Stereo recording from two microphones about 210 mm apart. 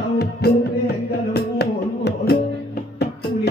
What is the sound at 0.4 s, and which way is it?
Music, 50° left (ahead or behind).